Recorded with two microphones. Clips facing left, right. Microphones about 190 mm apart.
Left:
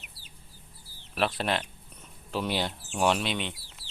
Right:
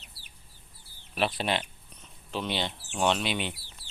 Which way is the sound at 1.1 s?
Centre (ahead or behind).